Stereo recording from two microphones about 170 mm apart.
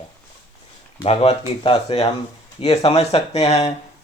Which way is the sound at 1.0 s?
35° left (ahead or behind).